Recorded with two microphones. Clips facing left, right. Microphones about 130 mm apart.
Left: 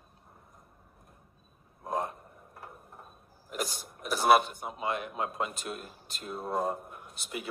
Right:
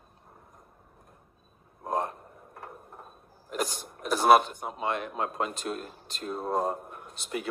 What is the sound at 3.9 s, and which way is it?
Speech, 40° right (ahead or behind).